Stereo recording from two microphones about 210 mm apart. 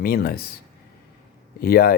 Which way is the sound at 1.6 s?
45° left (ahead or behind).